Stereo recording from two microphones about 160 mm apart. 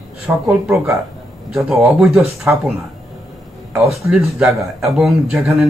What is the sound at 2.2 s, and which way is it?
Speech, 15° right (ahead or behind).